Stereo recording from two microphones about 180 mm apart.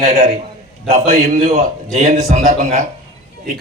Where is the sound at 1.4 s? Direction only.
40° right (ahead or behind).